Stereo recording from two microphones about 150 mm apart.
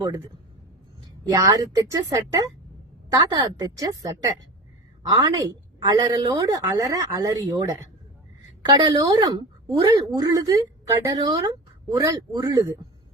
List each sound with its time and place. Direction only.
1.3 s a woman's voice: 25° right (ahead or behind)
5.1 s a woman's voice: 25° right (ahead or behind)